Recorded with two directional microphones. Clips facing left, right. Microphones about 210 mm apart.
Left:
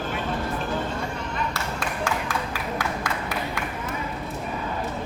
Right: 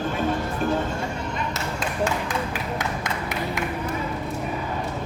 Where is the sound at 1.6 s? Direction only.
20° right (ahead or behind).